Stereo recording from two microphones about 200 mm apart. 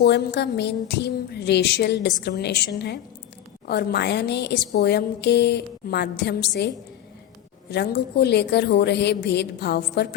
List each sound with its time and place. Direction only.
0.3 s speech: 55° left (ahead or behind)
7.7 s speech: 55° left (ahead or behind)